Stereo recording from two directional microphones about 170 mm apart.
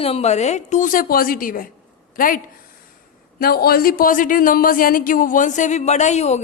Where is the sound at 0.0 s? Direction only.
35° left (ahead or behind).